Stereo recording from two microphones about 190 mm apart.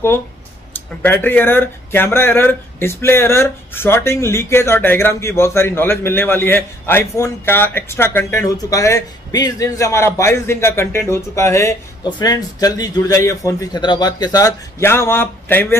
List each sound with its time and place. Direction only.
0.7 s speech: 10° left (ahead or behind)